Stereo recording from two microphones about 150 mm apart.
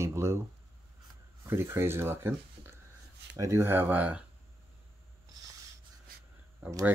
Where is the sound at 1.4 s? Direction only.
15° right (ahead or behind).